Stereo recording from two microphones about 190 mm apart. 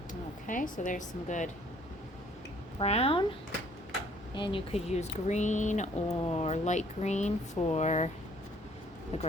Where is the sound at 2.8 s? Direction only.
30° left (ahead or behind).